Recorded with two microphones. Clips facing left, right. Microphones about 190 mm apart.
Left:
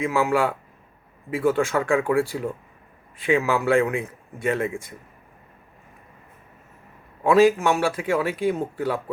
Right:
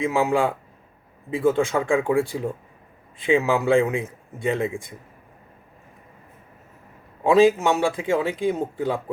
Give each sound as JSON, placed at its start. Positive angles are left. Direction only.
{"t": 0.0, "sound": "speech", "side_deg": -15}
{"t": 7.3, "sound": "speech", "side_deg": -20}